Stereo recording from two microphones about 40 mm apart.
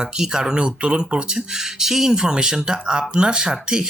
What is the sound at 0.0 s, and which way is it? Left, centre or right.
Speech, centre.